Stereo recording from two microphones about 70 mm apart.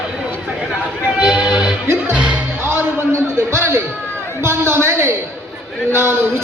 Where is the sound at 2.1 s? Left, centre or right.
Centre.